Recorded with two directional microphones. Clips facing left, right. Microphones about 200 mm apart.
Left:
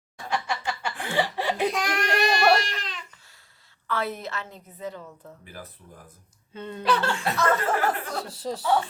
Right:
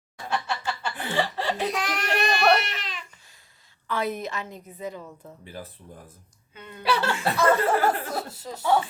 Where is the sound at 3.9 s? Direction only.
15° right (ahead or behind).